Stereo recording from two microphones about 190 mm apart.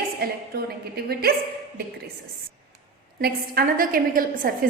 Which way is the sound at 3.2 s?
50° right (ahead or behind).